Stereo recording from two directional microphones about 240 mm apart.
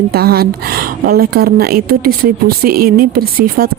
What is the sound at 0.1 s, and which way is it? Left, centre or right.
Speech, right.